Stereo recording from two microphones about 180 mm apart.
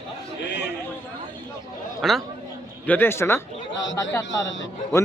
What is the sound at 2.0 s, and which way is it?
A man's voice, centre (ahead or behind).